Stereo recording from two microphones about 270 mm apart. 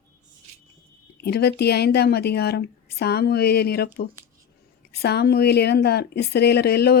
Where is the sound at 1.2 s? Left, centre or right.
Left.